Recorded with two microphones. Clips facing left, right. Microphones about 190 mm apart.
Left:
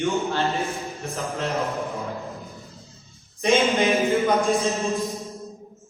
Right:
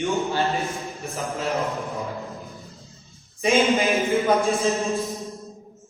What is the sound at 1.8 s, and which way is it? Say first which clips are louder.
Music: left 1 dB; centre (ahead or behind).